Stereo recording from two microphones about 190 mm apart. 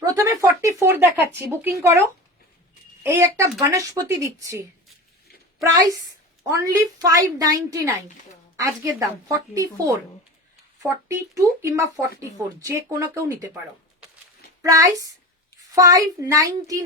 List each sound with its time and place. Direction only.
0.0 s a woman's voice: 15° right (ahead or behind)
6.4 s a woman's voice: 15° right (ahead or behind)
14.6 s a woman's voice: 20° right (ahead or behind)